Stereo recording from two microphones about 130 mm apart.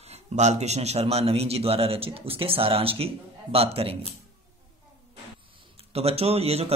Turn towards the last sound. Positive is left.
turn(degrees=-50)  # may be behind; listen again after turning